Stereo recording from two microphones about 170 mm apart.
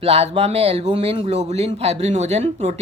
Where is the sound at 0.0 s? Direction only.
35° right (ahead or behind).